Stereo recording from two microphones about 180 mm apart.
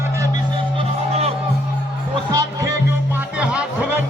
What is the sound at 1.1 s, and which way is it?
Music, 35° right (ahead or behind).